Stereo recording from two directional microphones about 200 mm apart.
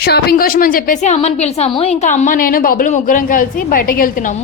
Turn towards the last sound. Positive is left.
turn(degrees=45)  # may be behind; listen again after turning